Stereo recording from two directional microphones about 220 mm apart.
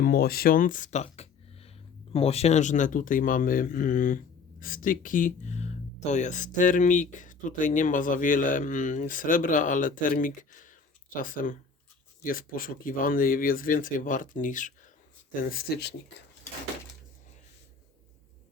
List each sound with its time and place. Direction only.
0.0 s speech: 45° left (ahead or behind)